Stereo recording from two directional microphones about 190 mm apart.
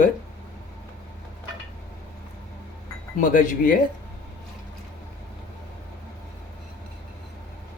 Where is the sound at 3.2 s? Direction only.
45° left (ahead or behind).